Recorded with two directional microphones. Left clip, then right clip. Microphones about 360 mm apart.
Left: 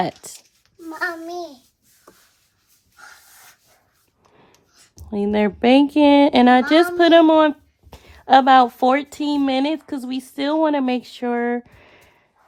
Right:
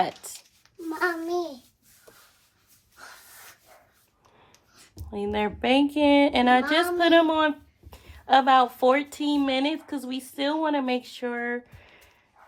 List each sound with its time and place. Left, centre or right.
4.9 s speech: left